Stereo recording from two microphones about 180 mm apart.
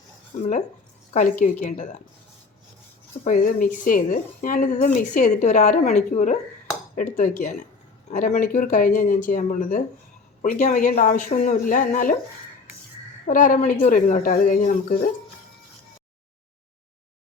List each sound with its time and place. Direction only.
0.3 s speech: 40° left (ahead or behind)
3.2 s speech: 45° left (ahead or behind)
13.2 s speech: 50° left (ahead or behind)